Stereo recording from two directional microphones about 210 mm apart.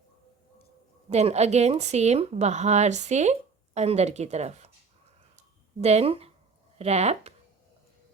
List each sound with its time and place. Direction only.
1.1 s a woman's voice: 30° right (ahead or behind)
5.8 s speech: 30° right (ahead or behind)